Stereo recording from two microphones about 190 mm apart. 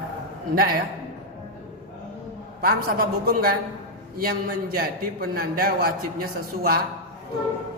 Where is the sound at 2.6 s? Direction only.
50° right (ahead or behind).